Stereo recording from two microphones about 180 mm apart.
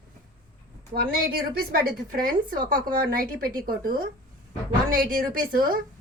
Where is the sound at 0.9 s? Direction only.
55° right (ahead or behind).